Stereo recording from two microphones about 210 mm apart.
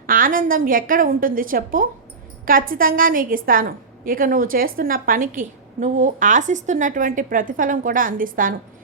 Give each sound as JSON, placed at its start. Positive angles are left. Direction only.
{"t": 0.1, "sound": "a woman's voice", "side_deg": -40}